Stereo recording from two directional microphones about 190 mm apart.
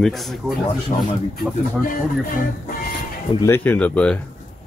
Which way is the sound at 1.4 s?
50° left (ahead or behind).